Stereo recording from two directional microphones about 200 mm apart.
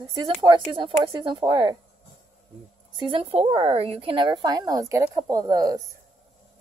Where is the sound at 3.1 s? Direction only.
30° right (ahead or behind).